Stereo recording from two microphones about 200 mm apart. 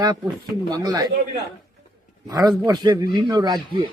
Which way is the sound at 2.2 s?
20° right (ahead or behind).